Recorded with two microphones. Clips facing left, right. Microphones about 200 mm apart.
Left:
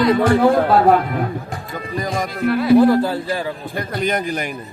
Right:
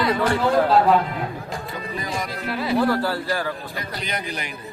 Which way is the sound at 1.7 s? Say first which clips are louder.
Left 7 dB; 45° left (ahead or behind).